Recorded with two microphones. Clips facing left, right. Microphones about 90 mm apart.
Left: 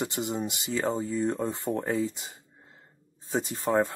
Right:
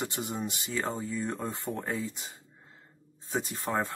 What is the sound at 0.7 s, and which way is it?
Speech, 20° left (ahead or behind).